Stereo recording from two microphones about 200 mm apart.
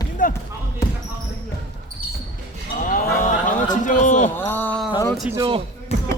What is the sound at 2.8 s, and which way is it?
Cattle, 40° left (ahead or behind).